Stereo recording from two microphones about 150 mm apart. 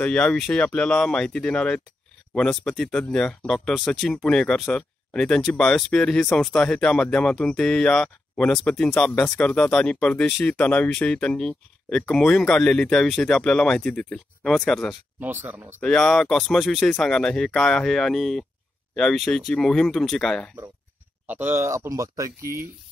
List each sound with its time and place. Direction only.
0.0 s speech: 5° left (ahead or behind)
15.1 s speech: 15° right (ahead or behind)
15.8 s speech: 5° left (ahead or behind)
21.3 s speech: 15° right (ahead or behind)